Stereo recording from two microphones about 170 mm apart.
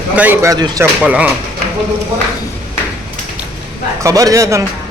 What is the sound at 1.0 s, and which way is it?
Speech, 10° right (ahead or behind).